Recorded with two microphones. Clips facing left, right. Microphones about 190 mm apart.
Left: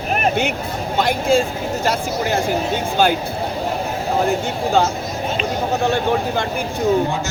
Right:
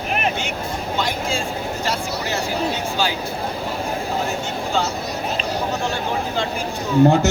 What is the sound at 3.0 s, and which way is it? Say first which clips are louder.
Speech: left 8 dB; 55° left (ahead or behind).